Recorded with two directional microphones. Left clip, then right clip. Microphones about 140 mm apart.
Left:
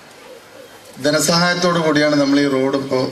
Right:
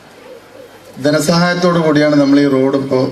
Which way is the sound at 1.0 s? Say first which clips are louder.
Right 3 dB; 5° right (ahead or behind).